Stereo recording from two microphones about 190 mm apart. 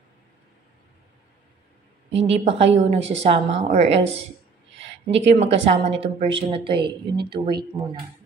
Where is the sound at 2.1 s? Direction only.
35° right (ahead or behind).